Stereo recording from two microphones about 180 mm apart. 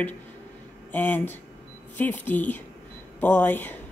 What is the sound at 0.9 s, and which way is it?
Speech, 10° left (ahead or behind).